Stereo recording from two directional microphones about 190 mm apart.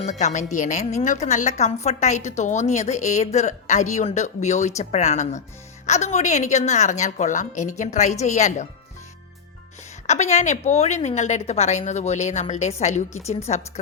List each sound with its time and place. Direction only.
0.0 s a woman's voice: 40° left (ahead or behind)
10.1 s a woman's voice: 35° left (ahead or behind)